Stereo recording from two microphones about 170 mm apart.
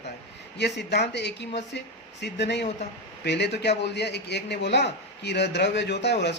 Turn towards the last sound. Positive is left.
turn(degrees=90)